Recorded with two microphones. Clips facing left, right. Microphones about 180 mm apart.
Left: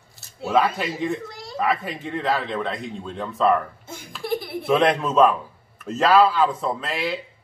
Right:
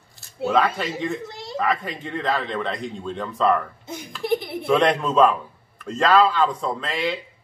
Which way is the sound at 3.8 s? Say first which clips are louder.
Right 4 dB; 20° right (ahead or behind).